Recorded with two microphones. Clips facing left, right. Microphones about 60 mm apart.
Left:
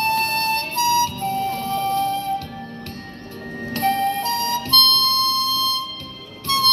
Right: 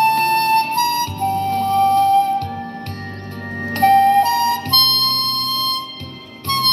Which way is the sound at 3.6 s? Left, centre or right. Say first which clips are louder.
Right 8 dB; right.